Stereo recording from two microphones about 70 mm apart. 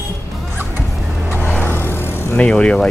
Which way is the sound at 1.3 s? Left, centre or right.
Left.